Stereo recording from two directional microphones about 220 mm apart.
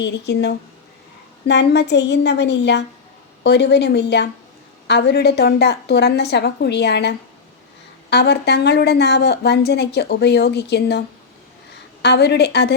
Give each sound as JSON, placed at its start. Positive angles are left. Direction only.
{"t": 0.0, "sound": "a woman's voice", "side_deg": 50}
{"t": 12.0, "sound": "a woman's voice", "side_deg": 50}